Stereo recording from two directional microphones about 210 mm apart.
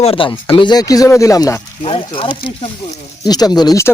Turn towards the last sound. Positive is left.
turn(degrees=15)  # may be behind; listen again after turning